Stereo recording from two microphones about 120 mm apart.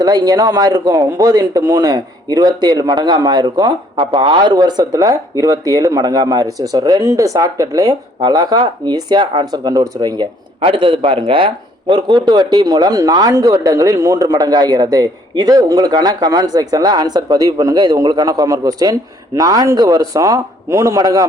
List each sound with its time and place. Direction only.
0.0 s speech: 35° right (ahead or behind)
10.6 s speech: 50° right (ahead or behind); by 21.2 s 30° right (ahead or behind)